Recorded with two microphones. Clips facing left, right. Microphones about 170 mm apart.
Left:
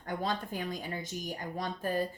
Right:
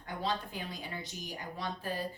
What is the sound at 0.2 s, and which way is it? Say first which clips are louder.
Speech: right 1 dB; 45° left (ahead or behind).